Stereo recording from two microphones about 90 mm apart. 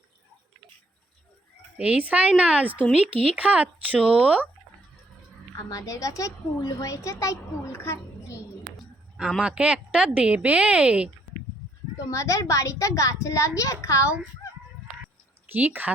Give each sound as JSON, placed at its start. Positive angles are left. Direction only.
{"t": 1.8, "sound": "speech", "side_deg": -15}
{"t": 5.6, "sound": "a woman's voice", "side_deg": 40}
{"t": 8.7, "sound": "a sound", "side_deg": -10}
{"t": 9.4, "sound": "speech", "side_deg": -10}
{"t": 12.1, "sound": "a woman's voice", "side_deg": 35}
{"t": 15.5, "sound": "speech", "side_deg": -20}